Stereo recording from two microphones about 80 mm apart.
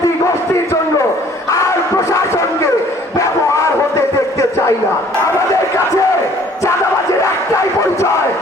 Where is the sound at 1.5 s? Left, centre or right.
Left.